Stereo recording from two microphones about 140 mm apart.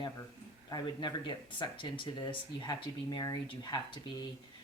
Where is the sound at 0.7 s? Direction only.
30° left (ahead or behind).